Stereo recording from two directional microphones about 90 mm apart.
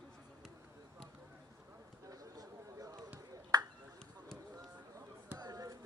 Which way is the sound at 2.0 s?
40° right (ahead or behind).